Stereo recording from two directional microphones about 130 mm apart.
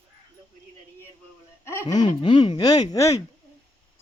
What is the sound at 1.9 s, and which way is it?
Speech, 35° left (ahead or behind).